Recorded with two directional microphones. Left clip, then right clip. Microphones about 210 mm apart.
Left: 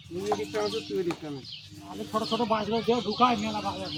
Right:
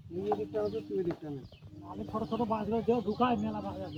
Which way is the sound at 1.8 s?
20° left (ahead or behind).